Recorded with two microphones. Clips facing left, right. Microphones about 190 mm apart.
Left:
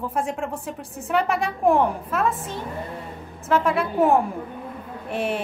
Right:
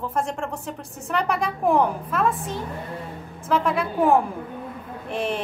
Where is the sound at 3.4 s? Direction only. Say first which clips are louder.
Left 1 dB; centre (ahead or behind).